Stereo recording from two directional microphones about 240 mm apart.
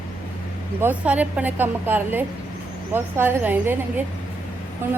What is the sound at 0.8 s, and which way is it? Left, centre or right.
Speech, centre.